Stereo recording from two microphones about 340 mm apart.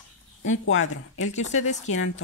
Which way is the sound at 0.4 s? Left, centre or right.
Left.